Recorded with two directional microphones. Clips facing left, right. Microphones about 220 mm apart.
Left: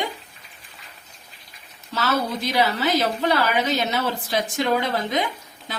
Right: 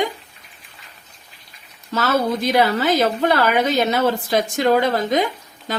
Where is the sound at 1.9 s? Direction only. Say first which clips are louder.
Right 5 dB; 50° right (ahead or behind).